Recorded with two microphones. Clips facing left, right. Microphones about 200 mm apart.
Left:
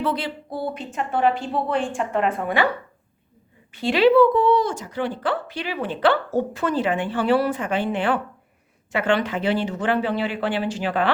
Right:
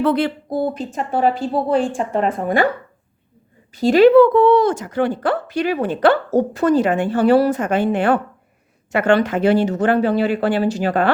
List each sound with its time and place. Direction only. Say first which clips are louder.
0.0 s speech: right 8 dB; 55° right (ahead or behind); by 2.6 s 40° right (ahead or behind)
3.8 s speech: right 6 dB; 45° right (ahead or behind)